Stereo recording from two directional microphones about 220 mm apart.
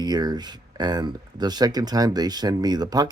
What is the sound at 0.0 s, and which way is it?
Speech, 20° right (ahead or behind).